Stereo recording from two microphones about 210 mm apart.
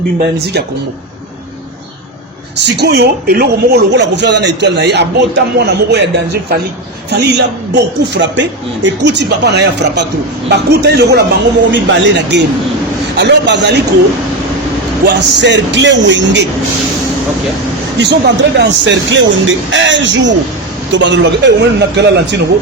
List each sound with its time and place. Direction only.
2.6 s speech: 55° right (ahead or behind)
7.1 s a man's voice: 55° right (ahead or behind)
15.0 s a man's voice: 55° right (ahead or behind)
18.0 s a man's voice: 55° right (ahead or behind)